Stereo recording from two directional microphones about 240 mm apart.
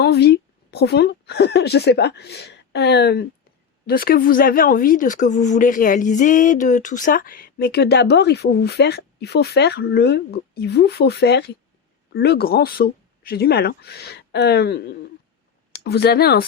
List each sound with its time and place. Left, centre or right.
0.0 s speech: left